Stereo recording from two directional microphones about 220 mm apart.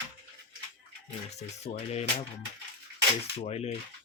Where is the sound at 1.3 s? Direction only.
30° left (ahead or behind).